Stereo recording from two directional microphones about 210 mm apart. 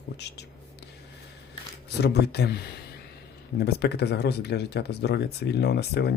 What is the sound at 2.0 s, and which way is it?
Speech, 50° left (ahead or behind).